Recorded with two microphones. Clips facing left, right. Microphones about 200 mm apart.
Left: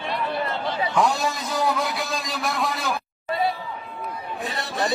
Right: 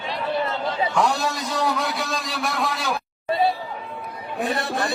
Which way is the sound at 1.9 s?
Centre (ahead or behind).